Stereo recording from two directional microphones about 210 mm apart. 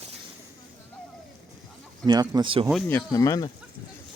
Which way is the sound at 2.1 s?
20° right (ahead or behind).